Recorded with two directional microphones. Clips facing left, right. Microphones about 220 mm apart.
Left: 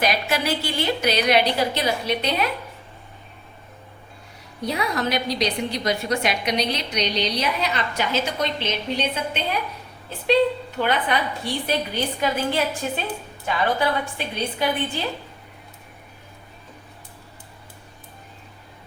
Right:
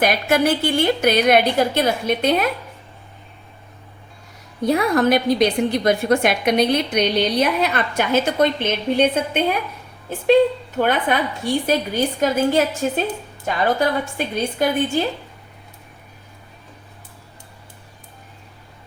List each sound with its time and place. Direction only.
0.0 s a woman's voice: 50° right (ahead or behind)
4.6 s a woman's voice: 50° right (ahead or behind)